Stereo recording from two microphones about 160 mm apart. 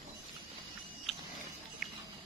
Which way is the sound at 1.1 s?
Centre (ahead or behind).